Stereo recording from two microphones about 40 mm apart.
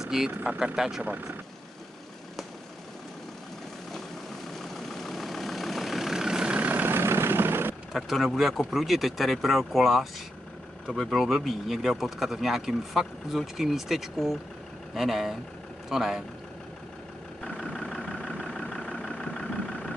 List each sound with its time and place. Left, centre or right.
0.0 s vehicle: centre
0.7 s speech: centre
4.6 s vehicle: centre
6.2 s vehicle: right
6.6 s vehicle: right
6.9 s vehicle: right
7.9 s speech: centre
17.7 s vehicle: centre